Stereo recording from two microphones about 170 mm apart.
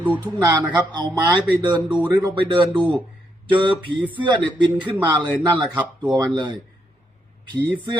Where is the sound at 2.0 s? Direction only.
10° right (ahead or behind).